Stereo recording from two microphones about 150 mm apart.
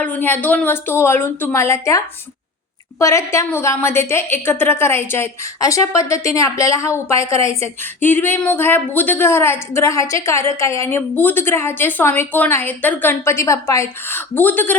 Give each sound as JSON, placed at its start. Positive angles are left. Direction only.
{"t": 0.0, "sound": "a woman's voice", "side_deg": 10}